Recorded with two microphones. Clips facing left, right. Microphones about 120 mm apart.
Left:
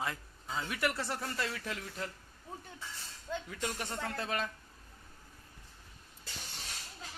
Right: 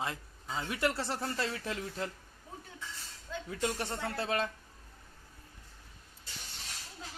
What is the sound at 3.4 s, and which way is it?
A man's voice, 30° right (ahead or behind).